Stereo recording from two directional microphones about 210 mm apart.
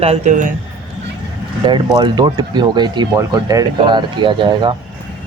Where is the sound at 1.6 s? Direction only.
20° right (ahead or behind).